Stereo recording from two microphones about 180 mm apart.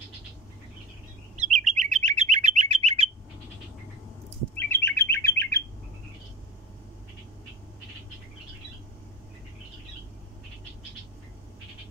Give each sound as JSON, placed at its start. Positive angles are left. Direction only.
{"t": 1.3, "sound": "chirp", "side_deg": -45}
{"t": 4.6, "sound": "bird", "side_deg": 15}